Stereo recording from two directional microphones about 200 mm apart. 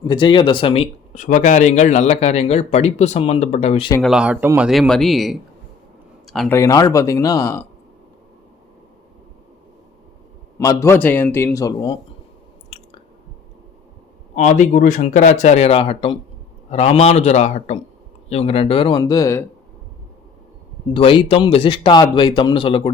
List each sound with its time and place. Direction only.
0.0 s speech: 20° left (ahead or behind)
4.0 s a man's voice: 5° right (ahead or behind)
6.2 s a sound: centre (ahead or behind)
6.5 s a man's voice: 15° left (ahead or behind)
10.6 s a man's voice: 15° left (ahead or behind)
14.3 s a man's voice: 35° left (ahead or behind); by 19.5 s 15° left (ahead or behind)
20.9 s a man's voice: 25° left (ahead or behind)